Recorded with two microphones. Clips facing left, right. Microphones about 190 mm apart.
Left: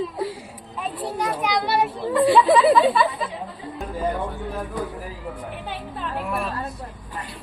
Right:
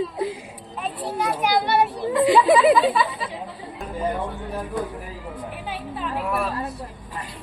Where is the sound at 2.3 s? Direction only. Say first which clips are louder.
Even; 15° right (ahead or behind).